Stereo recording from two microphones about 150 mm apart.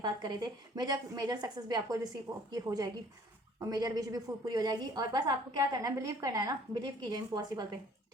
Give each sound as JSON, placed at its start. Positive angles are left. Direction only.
{"t": 0.0, "sound": "a woman's voice", "side_deg": -30}